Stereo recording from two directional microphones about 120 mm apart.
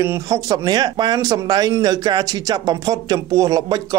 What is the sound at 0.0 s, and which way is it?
Speech, 25° right (ahead or behind).